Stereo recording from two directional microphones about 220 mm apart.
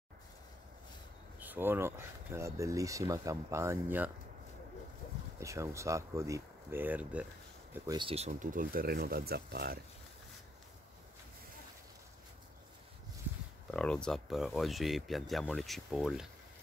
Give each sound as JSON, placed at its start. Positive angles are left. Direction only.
{"t": 1.4, "sound": "speech", "side_deg": -10}
{"t": 5.4, "sound": "speech", "side_deg": -15}
{"t": 13.7, "sound": "speech", "side_deg": 5}